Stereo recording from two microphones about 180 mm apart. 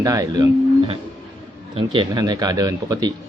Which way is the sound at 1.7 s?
30° right (ahead or behind).